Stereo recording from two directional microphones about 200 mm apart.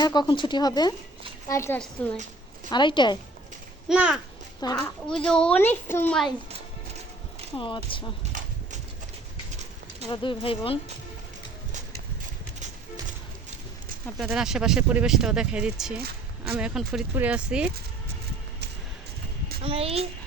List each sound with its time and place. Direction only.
0.0 s a woman's voice: 20° left (ahead or behind)
2.6 s speech: 25° left (ahead or behind)
3.8 s speech: 5° right (ahead or behind)
4.6 s speech: 20° left (ahead or behind)
5.2 s speech: 5° left (ahead or behind)
7.5 s speech: 25° left (ahead or behind)
8.2 s a sound: 35° right (ahead or behind)
10.1 s speech: 25° left (ahead or behind)
14.2 s speech: 5° right (ahead or behind)
19.6 s a child's voice: 30° right (ahead or behind)